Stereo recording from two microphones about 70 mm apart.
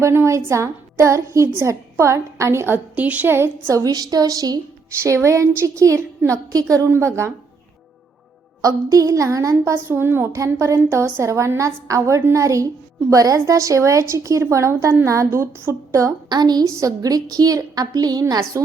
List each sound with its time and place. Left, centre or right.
0.0 s a woman's voice: right
3.7 s a woman's voice: right
5.0 s a woman's voice: right
6.8 s a woman's voice: right
8.6 s a woman's voice: right
10.3 s a woman's voice: right
16.3 s a woman's voice: right
16.6 s a woman's voice: right